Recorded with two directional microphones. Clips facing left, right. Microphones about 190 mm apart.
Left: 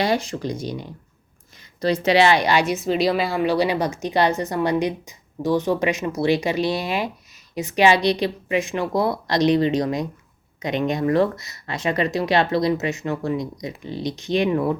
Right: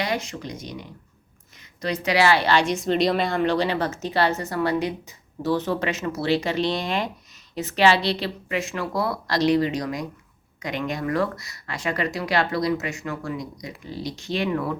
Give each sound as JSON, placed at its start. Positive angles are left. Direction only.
{"t": 0.0, "sound": "a woman's voice", "side_deg": 30}